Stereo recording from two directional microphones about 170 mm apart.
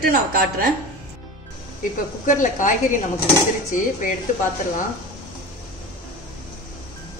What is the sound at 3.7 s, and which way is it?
Speech, 50° left (ahead or behind).